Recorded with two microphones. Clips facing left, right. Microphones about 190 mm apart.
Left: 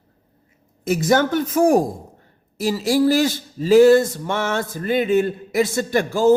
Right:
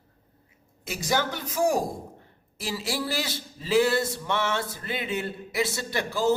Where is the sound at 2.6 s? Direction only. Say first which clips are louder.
Left 12 dB; 40° left (ahead or behind).